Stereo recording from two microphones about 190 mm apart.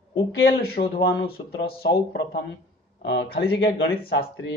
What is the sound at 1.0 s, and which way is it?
Speech, 60° left (ahead or behind).